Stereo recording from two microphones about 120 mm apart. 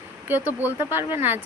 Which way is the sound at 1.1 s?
15° right (ahead or behind).